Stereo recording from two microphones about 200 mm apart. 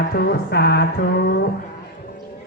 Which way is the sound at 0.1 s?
55° left (ahead or behind).